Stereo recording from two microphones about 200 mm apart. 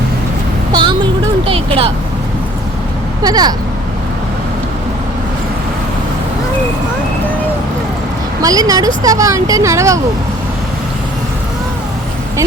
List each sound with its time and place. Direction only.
0.7 s a sound: 20° right (ahead or behind)
1.5 s vehicle: 25° right (ahead or behind)
3.2 s speech: 20° right (ahead or behind)
8.4 s speech: 20° right (ahead or behind)